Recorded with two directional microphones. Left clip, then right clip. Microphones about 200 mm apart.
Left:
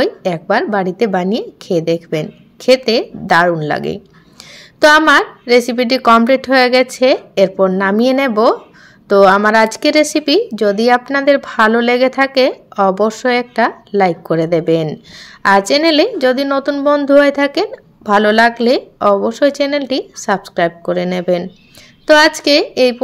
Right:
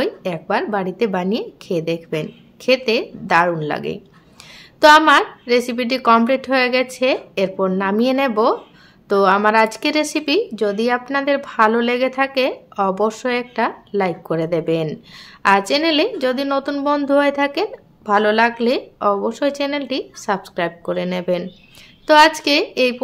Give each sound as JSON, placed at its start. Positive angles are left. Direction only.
{"t": 0.0, "sound": "speech", "side_deg": 20}